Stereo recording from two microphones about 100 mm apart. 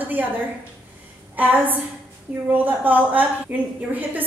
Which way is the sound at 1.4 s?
15° right (ahead or behind).